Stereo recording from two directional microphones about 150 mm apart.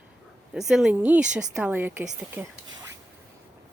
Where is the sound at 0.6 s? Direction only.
Centre (ahead or behind).